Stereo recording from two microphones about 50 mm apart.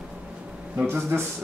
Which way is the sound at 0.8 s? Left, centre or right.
Right.